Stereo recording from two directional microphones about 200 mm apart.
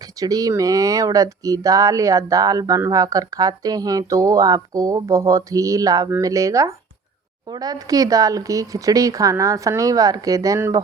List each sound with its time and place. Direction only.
0.2 s speech: 20° right (ahead or behind)